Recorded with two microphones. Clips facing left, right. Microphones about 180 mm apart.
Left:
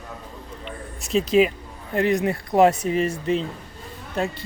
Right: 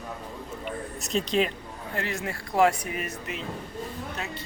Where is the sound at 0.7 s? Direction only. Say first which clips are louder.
Left 2 dB; centre (ahead or behind).